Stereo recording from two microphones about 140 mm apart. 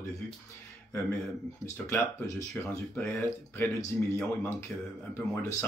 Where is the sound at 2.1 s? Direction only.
20° left (ahead or behind).